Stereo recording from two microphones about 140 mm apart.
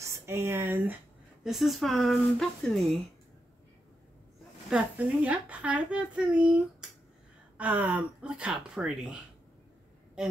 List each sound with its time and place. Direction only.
0.0 s speech: 20° right (ahead or behind)
1.4 s speech: centre (ahead or behind)
4.6 s a child's voice: 10° right (ahead or behind)